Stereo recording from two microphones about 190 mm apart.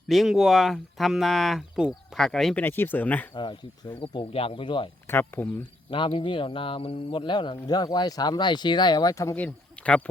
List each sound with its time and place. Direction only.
0.1 s speech: centre (ahead or behind)
3.3 s speech: 25° left (ahead or behind)
5.0 s speech: 10° left (ahead or behind)
5.9 s speech: 25° left (ahead or behind); by 10.0 s 5° left (ahead or behind)